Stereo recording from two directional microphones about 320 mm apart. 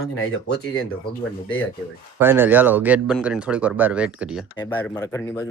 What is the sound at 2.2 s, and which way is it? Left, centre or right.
Speech, centre.